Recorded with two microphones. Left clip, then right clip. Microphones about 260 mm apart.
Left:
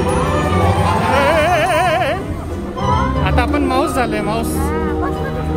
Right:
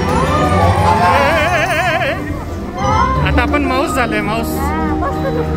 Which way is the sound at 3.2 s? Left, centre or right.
Centre.